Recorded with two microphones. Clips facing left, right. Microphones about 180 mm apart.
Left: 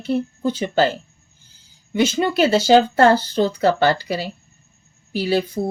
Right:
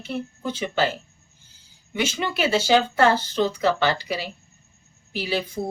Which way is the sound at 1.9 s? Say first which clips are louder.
Left 8 dB; 40° left (ahead or behind).